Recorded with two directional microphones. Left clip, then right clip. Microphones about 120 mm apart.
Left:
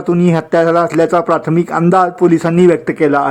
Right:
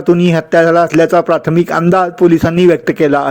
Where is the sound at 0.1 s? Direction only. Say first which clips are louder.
Right 3 dB; 10° right (ahead or behind).